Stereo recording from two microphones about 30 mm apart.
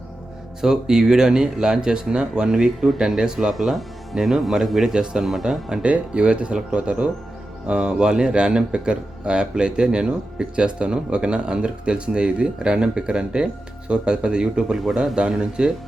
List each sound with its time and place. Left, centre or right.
0.6 s speech: centre
5.8 s speech: right